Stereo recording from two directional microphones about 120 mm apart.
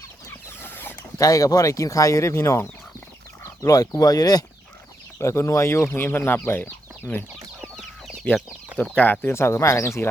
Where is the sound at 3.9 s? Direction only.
30° left (ahead or behind).